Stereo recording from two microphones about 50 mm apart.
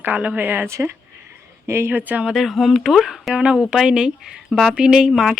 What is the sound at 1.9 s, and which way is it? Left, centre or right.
Speech, right.